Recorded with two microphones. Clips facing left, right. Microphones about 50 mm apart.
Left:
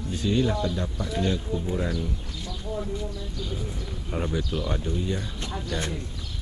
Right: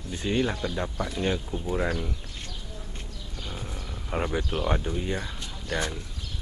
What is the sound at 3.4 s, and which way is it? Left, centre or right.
Speech, right.